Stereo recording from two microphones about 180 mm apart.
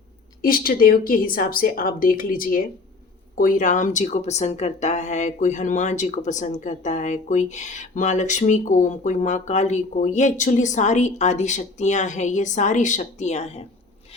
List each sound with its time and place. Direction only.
0.4 s a woman's voice: 50° left (ahead or behind); by 13.7 s 35° left (ahead or behind)